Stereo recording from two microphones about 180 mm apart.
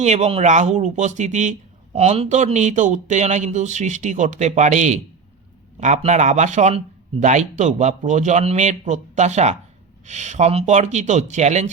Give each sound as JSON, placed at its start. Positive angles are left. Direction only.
{"t": 0.0, "sound": "speech", "side_deg": -35}